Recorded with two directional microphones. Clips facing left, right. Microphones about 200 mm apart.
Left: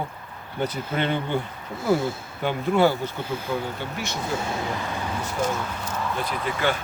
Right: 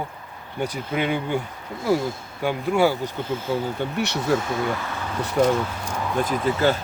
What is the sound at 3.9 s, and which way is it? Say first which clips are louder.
Speech: right 6 dB; 70° right (ahead or behind).